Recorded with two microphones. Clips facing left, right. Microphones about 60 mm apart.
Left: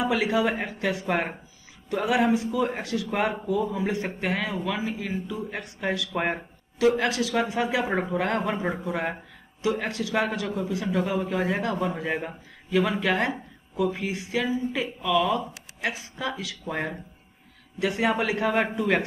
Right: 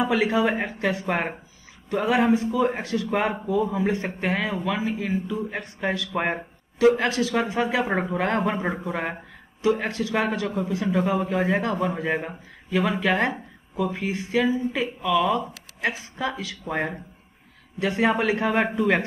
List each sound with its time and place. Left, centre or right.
0.0 s speech: right
11.8 s speech: centre; by 14.3 s right
14.7 s speech: centre
16.2 s speech: right
18.5 s speech: centre